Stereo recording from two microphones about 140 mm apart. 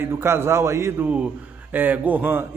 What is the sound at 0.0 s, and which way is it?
A man's voice, 15° right (ahead or behind).